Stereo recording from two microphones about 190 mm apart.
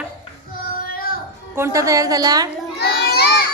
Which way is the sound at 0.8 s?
50° left (ahead or behind).